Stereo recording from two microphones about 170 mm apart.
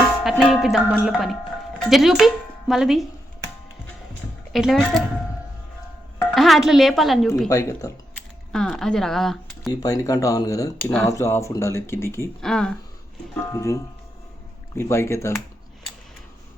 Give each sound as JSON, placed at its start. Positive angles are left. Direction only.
{"t": 0.3, "sound": "a woman's voice", "side_deg": 0}
{"t": 4.5, "sound": "a woman's voice", "side_deg": 0}
{"t": 6.3, "sound": "a woman's voice", "side_deg": 0}
{"t": 7.4, "sound": "speech", "side_deg": 20}
{"t": 8.5, "sound": "speech", "side_deg": 5}
{"t": 9.8, "sound": "speech", "side_deg": 20}
{"t": 12.4, "sound": "a woman's voice", "side_deg": 5}
{"t": 13.5, "sound": "speech", "side_deg": 20}
{"t": 14.8, "sound": "speech", "side_deg": 15}